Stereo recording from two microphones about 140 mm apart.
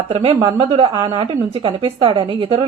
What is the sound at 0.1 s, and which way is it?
A woman's voice, 45° right (ahead or behind).